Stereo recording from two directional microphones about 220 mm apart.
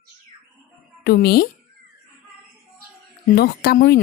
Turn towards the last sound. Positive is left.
turn(degrees=45)  # may be behind; listen again after turning